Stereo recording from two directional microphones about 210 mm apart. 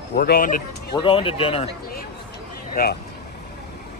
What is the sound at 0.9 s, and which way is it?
Speech, 25° left (ahead or behind).